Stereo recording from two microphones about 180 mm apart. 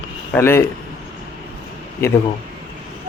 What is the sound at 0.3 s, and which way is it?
Speech, 15° left (ahead or behind).